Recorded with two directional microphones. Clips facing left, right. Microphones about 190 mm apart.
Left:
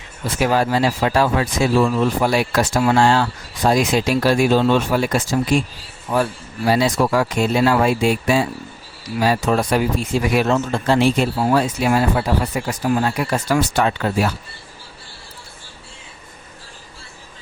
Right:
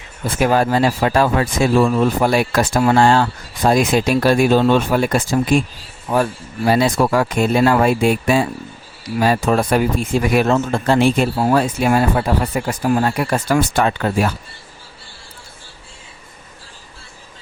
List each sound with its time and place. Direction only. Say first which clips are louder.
0.3 s speech: right 2 dB; 50° right (ahead or behind)